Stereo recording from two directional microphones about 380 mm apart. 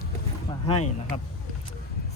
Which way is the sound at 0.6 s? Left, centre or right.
Centre.